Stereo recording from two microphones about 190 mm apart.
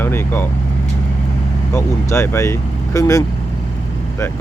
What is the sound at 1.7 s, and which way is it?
Speech, 15° left (ahead or behind).